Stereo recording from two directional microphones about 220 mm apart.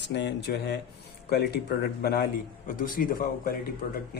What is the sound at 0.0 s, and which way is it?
Speech, 50° left (ahead or behind).